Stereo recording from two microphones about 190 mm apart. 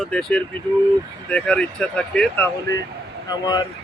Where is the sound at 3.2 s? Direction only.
20° left (ahead or behind).